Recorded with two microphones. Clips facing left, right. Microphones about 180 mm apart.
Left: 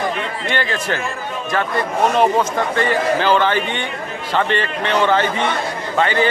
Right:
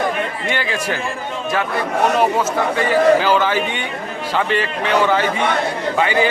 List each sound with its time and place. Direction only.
0.4 s a man's voice: 10° right (ahead or behind)
2.1 s a man's voice: 5° right (ahead or behind)